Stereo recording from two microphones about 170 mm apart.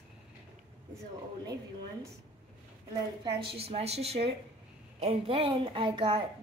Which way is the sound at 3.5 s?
35° right (ahead or behind).